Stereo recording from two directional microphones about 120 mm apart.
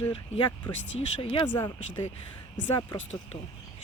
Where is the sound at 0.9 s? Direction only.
55° left (ahead or behind).